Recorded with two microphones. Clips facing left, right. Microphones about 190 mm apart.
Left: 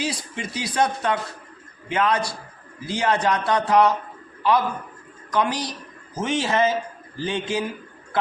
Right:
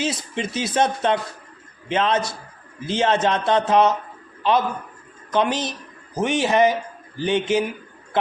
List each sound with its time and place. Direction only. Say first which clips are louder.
0.0 s speech: right 3 dB; 20° right (ahead or behind)